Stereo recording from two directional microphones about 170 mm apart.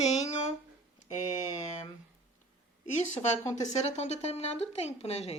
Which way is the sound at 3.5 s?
40° left (ahead or behind).